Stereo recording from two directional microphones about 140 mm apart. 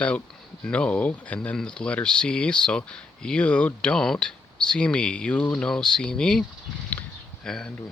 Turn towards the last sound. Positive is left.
turn(degrees=5)  # may be behind; listen again after turning